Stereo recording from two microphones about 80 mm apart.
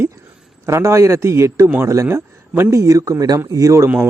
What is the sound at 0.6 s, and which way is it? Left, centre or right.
Speech, right.